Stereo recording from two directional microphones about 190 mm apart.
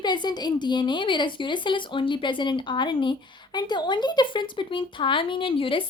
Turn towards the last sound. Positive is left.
turn(degrees=25)  # may be behind; listen again after turning